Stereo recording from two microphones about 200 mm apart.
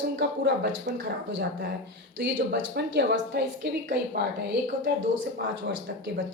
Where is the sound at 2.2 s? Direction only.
60° right (ahead or behind).